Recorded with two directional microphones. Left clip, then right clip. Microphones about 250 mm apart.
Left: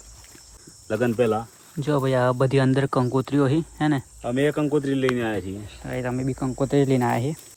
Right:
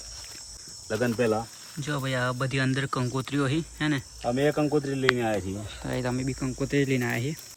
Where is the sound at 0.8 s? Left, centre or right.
Left.